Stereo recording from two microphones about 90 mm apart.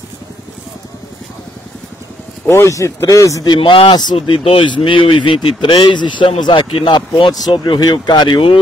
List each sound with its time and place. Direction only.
2.4 s speech: 30° left (ahead or behind)
3.4 s speech: 65° left (ahead or behind)
7.8 s speech: 50° left (ahead or behind)